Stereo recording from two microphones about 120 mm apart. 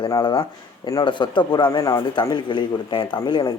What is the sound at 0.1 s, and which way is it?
Speech, 35° left (ahead or behind).